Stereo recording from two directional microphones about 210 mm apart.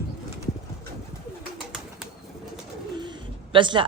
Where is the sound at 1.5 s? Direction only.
Centre (ahead or behind).